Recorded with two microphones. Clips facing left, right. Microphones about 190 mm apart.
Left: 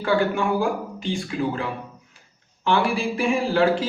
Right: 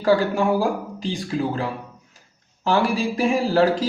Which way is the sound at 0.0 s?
35° right (ahead or behind).